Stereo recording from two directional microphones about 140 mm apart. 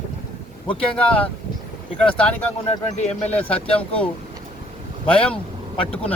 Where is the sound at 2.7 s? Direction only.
50° left (ahead or behind).